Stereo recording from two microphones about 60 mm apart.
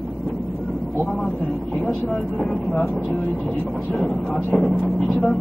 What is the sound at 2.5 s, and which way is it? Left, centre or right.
Speech, centre.